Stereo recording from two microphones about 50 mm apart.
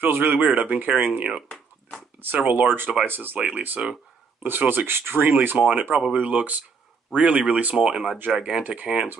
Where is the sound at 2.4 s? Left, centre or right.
Right.